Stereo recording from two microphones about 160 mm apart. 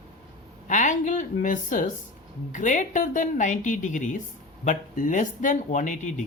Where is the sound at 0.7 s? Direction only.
50° left (ahead or behind).